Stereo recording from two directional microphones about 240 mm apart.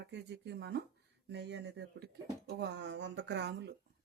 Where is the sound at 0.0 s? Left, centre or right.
Right.